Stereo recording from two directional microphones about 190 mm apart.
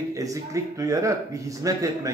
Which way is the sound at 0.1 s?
15° right (ahead or behind).